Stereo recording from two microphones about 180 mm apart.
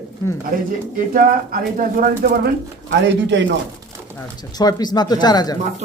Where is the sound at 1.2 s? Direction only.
50° right (ahead or behind); by 3.5 s 85° right.